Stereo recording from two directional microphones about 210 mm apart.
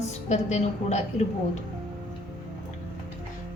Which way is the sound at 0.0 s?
35° left (ahead or behind).